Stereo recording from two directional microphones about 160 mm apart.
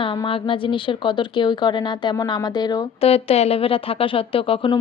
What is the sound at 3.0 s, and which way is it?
A woman's voice, 40° left (ahead or behind).